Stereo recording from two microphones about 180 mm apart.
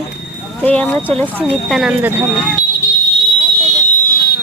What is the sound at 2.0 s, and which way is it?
Speech, 10° right (ahead or behind).